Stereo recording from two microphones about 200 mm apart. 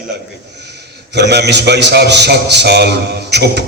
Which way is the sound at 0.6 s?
55° right (ahead or behind).